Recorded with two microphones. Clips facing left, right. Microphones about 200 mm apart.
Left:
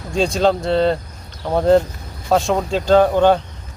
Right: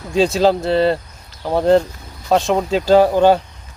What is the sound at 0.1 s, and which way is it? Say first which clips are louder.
Speech: right 2 dB; 5° right (ahead or behind).